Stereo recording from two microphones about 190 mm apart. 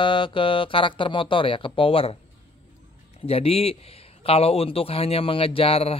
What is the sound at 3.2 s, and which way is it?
Speech, 30° left (ahead or behind).